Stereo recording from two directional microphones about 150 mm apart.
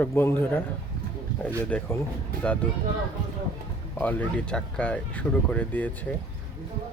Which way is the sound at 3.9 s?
10° left (ahead or behind).